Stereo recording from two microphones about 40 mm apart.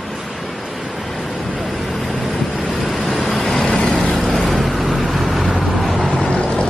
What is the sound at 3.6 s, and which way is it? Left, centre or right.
Vehicle, centre.